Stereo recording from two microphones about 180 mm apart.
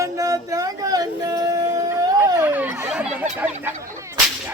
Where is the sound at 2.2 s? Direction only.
10° right (ahead or behind).